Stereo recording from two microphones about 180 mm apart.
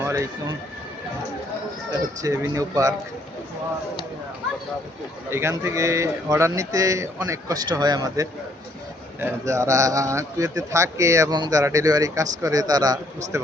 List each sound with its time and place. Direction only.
0.0 s a sound: 15° right (ahead or behind)
2.2 s speech: 15° right (ahead or behind)
5.3 s speech: 15° right (ahead or behind)